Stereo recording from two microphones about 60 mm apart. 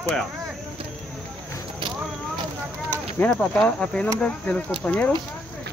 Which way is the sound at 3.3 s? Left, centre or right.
Centre.